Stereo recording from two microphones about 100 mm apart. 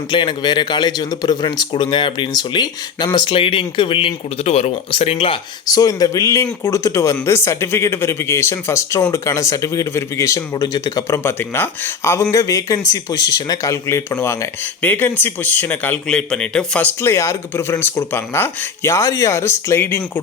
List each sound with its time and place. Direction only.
0.1 s speech: 50° left (ahead or behind); by 5.4 s 70° left (ahead or behind)
5.6 s speech: 40° left (ahead or behind)
11.2 s speech: 25° left (ahead or behind)
16.0 s speech: 10° left (ahead or behind); by 20.0 s 25° left (ahead or behind)